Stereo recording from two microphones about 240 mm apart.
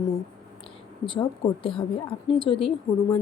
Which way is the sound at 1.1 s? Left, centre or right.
Left.